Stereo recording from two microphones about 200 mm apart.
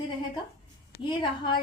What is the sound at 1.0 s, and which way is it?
Speech, 20° left (ahead or behind).